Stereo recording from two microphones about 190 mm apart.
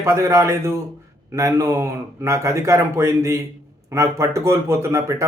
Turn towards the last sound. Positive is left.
turn(degrees=-15)  # may be behind; listen again after turning